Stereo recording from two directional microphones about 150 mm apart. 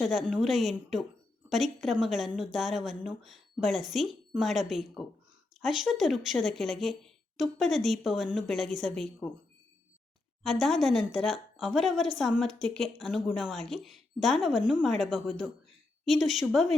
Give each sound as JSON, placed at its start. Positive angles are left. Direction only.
{"t": 0.0, "sound": "a woman's voice", "side_deg": 0}
{"t": 10.4, "sound": "a woman's voice", "side_deg": 0}